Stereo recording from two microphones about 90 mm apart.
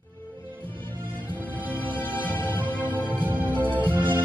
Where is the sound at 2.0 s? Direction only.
20° left (ahead or behind).